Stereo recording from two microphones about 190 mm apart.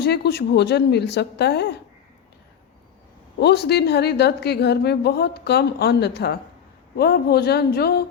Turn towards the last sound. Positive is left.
turn(degrees=55)  # may be behind; listen again after turning